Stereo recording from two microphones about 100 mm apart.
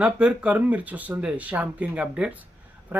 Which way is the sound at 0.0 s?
10° right (ahead or behind).